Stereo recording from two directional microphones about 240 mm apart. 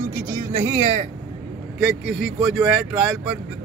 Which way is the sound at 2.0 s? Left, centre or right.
Left.